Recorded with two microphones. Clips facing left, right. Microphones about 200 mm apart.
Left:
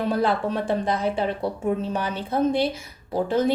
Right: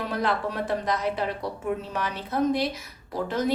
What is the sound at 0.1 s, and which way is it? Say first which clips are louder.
A woman's voice: left 3 dB; 30° left (ahead or behind).